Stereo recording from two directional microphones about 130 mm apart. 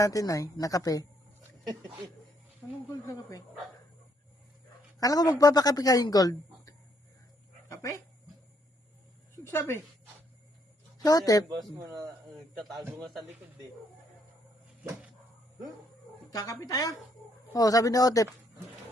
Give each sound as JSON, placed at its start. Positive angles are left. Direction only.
{"t": 0.0, "sound": "speech", "side_deg": 25}
{"t": 3.1, "sound": "speech", "side_deg": 25}
{"t": 4.9, "sound": "speech", "side_deg": 30}
{"t": 9.5, "sound": "speech", "side_deg": 20}
{"t": 10.9, "sound": "speech", "side_deg": 30}
{"t": 16.3, "sound": "speech", "side_deg": 30}